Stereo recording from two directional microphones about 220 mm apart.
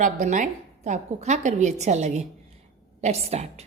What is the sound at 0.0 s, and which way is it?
A woman's voice, 35° right (ahead or behind).